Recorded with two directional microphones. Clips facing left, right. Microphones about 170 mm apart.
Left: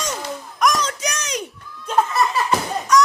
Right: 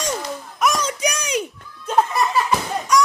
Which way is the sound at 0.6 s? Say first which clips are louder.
Even; 10° right (ahead or behind).